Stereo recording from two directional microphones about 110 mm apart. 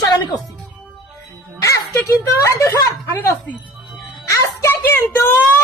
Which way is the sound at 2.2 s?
30° left (ahead or behind).